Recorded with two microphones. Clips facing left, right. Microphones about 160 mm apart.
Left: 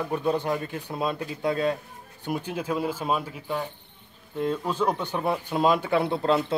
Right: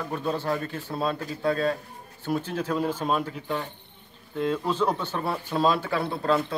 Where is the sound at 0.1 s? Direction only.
15° left (ahead or behind).